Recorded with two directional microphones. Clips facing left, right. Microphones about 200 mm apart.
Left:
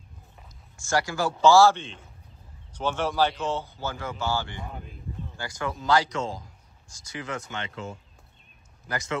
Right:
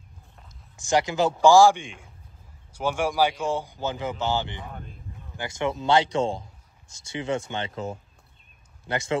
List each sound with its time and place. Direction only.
0.7 s speech: 20° right (ahead or behind)